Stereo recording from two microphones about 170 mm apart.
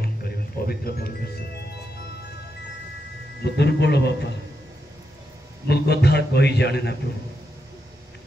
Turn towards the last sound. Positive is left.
turn(degrees=75)  # may be behind; listen again after turning